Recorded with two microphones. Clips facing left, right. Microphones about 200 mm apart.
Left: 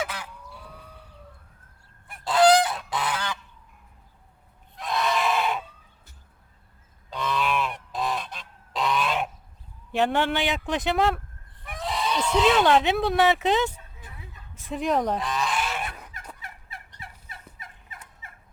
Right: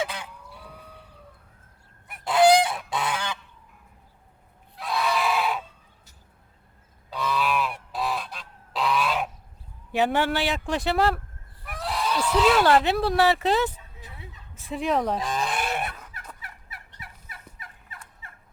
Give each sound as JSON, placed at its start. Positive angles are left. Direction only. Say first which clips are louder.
{"t": 0.0, "sound": "fowl", "louder": "right 2 dB", "side_deg": -25}
{"t": 2.2, "sound": "goose", "louder": "even", "side_deg": -25}
{"t": 4.8, "sound": "goat", "louder": "even", "side_deg": -5}
{"t": 7.1, "sound": "goose", "louder": "right 1 dB", "side_deg": -5}
{"t": 10.0, "sound": "speech", "louder": "even", "side_deg": -5}
{"t": 14.7, "sound": "speech", "louder": "even", "side_deg": 0}
{"t": 15.2, "sound": "speech", "louder": "even", "side_deg": -45}
{"t": 16.4, "sound": "fowl", "louder": "left 2 dB", "side_deg": 25}